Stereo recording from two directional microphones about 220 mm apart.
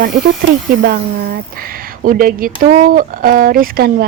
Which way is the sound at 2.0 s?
40° right (ahead or behind).